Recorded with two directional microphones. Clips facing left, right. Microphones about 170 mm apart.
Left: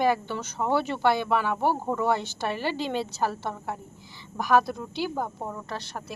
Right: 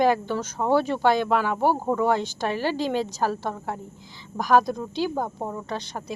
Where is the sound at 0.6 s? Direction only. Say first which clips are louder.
Right 3 dB; 15° right (ahead or behind).